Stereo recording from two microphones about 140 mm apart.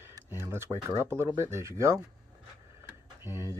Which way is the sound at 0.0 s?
20° right (ahead or behind).